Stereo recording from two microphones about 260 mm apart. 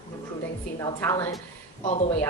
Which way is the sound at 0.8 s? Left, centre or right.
Centre.